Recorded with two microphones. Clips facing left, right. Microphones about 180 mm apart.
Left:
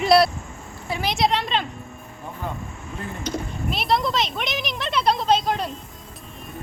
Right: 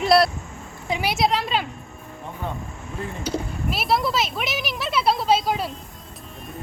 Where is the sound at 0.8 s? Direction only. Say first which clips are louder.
Right 2 dB; 15° right (ahead or behind).